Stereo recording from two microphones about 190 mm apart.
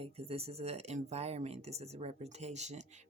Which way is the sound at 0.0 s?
30° right (ahead or behind).